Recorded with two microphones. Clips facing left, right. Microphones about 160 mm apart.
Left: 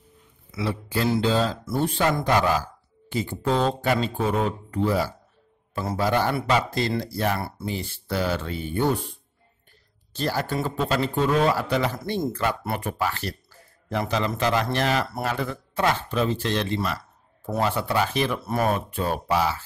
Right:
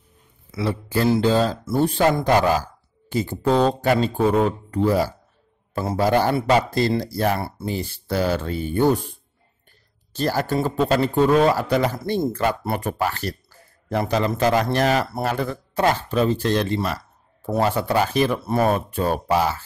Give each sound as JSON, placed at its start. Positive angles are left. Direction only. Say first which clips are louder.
{"t": 0.5, "sound": "a man's voice", "louder": "right 3 dB", "side_deg": -45}
{"t": 7.7, "sound": "speech", "louder": "right 5 dB", "side_deg": -40}
{"t": 10.1, "sound": "a man's voice", "louder": "right 4 dB", "side_deg": -45}